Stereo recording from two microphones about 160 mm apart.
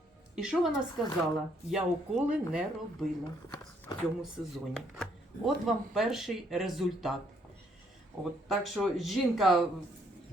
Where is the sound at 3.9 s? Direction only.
25° left (ahead or behind).